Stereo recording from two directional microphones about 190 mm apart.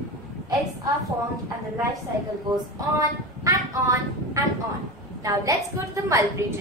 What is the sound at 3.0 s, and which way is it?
A woman's voice, 20° right (ahead or behind).